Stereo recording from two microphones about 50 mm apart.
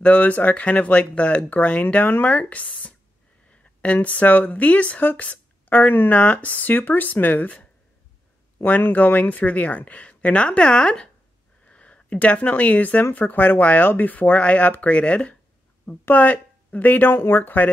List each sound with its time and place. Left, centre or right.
0.0 s speech: left
8.6 s speech: left